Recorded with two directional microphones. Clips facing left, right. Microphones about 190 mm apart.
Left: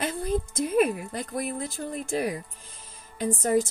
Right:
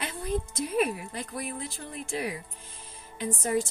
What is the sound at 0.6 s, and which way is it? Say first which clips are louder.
A woman's voice: left 6 dB; 45° left (ahead or behind).